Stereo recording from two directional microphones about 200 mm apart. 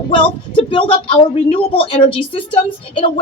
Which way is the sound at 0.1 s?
25° left (ahead or behind).